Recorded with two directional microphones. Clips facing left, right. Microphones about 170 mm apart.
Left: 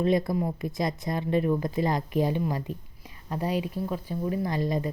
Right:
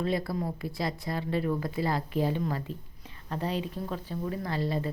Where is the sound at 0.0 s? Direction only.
20° left (ahead or behind).